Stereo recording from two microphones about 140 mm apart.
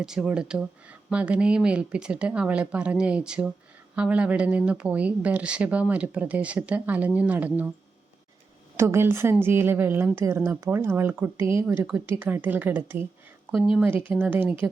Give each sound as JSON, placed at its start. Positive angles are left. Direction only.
{"t": 0.0, "sound": "speech", "side_deg": -5}
{"t": 8.7, "sound": "a woman's voice", "side_deg": -20}